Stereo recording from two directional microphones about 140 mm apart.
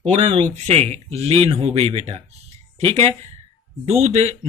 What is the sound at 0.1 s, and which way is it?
Speech, 45° right (ahead or behind).